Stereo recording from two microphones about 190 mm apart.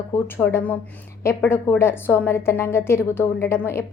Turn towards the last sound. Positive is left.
turn(degrees=15)  # may be behind; listen again after turning